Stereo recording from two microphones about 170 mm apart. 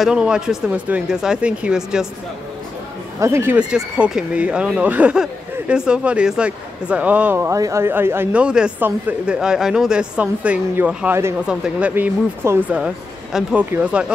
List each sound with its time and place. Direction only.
0.0 s speech: 5° right (ahead or behind)
3.2 s speech: 15° right (ahead or behind)